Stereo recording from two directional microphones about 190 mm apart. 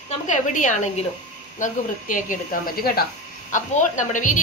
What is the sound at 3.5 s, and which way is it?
Speech, 40° left (ahead or behind).